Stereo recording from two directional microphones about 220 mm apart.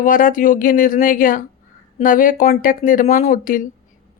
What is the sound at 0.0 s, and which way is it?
Speech, 40° left (ahead or behind).